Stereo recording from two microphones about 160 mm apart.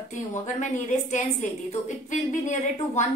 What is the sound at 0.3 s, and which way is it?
A woman's voice, 50° left (ahead or behind).